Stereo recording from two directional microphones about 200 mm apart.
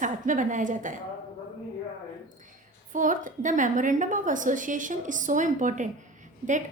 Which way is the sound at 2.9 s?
40° right (ahead or behind).